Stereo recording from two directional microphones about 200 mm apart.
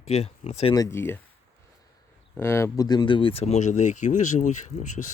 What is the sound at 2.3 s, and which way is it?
Speech, 10° left (ahead or behind).